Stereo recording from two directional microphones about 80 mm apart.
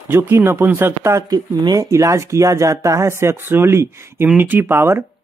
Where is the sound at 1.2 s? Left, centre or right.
Right.